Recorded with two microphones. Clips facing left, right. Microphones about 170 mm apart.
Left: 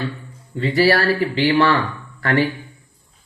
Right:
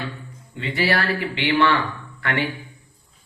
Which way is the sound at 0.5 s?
40° left (ahead or behind).